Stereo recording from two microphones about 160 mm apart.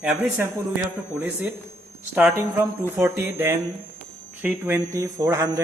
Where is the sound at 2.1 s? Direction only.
15° right (ahead or behind).